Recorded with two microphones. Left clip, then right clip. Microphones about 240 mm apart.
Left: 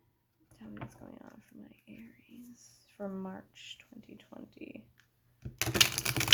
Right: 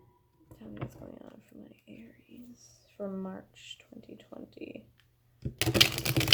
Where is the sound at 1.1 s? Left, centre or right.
Left.